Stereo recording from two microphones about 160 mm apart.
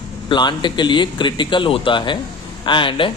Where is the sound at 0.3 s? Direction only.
30° left (ahead or behind).